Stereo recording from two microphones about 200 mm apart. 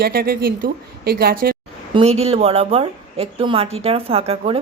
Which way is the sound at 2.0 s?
30° right (ahead or behind).